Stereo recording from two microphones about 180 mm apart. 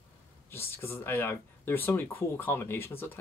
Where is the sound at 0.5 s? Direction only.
10° left (ahead or behind).